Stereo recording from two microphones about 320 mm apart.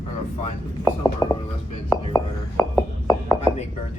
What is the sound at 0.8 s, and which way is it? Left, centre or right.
Speech, centre.